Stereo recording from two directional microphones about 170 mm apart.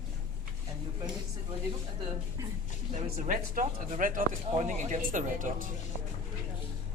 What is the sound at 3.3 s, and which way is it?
Speech, 50° right (ahead or behind).